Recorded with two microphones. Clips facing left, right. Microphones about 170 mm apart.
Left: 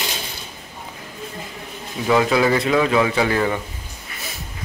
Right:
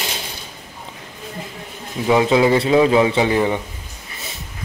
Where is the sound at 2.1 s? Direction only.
20° right (ahead or behind).